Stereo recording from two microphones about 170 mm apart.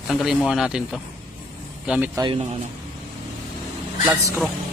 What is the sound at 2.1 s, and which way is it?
Speech, 30° right (ahead or behind).